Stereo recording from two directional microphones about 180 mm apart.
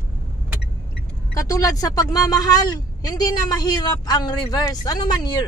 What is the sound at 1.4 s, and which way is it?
Speech, 20° left (ahead or behind).